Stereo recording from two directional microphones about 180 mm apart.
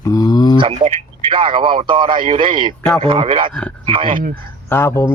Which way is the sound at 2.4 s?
30° right (ahead or behind).